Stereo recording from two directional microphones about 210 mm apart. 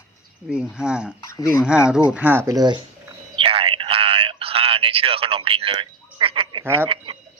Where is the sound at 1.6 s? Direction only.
5° right (ahead or behind).